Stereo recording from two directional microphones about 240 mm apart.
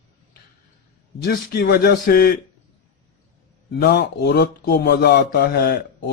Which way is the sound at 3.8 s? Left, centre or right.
Left.